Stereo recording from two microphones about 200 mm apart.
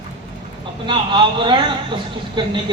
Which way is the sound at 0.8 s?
25° right (ahead or behind).